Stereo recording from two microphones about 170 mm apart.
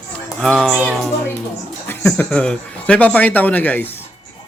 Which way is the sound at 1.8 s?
10° left (ahead or behind).